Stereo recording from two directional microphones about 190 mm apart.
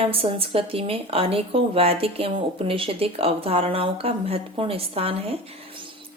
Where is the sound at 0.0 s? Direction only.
30° right (ahead or behind).